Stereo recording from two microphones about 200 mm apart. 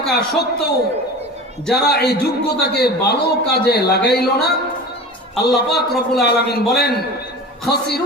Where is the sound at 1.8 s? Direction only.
55° left (ahead or behind).